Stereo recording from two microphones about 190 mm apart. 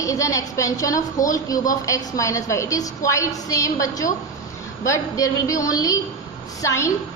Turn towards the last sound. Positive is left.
turn(degrees=15)  # may be behind; listen again after turning